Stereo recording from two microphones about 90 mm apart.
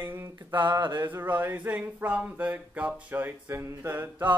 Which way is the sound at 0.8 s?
55° right (ahead or behind).